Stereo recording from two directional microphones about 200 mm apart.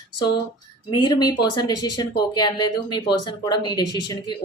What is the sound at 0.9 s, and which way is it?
Speech, 20° left (ahead or behind).